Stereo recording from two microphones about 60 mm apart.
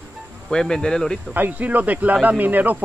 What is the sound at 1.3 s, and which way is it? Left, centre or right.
Speech, right.